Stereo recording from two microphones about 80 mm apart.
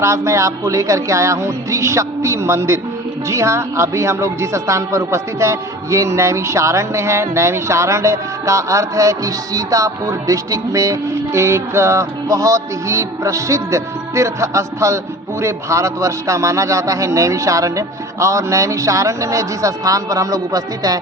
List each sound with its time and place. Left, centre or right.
0.0 s a woman's voice: right